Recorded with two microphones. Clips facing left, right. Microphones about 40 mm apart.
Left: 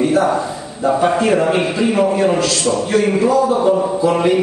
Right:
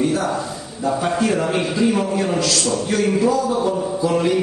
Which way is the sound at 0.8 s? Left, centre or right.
Centre.